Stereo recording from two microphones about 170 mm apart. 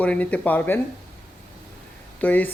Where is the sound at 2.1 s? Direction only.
10° left (ahead or behind).